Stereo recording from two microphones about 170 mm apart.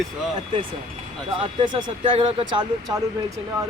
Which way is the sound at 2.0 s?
35° right (ahead or behind).